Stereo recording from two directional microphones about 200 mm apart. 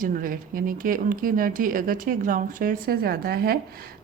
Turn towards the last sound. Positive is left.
turn(degrees=-50)  # may be behind; listen again after turning